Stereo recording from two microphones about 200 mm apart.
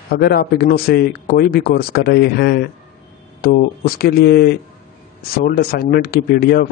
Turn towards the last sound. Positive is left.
turn(degrees=50)  # may be behind; listen again after turning